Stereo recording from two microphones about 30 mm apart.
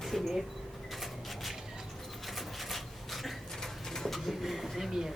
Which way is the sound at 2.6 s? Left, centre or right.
Centre.